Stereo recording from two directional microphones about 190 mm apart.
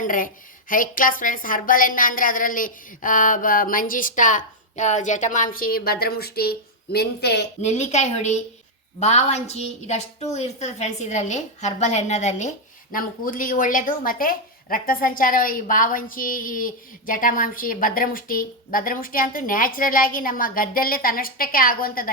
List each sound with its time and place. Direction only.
0.0 s a woman's voice: 45° left (ahead or behind)
7.6 s a woman's voice: 35° left (ahead or behind)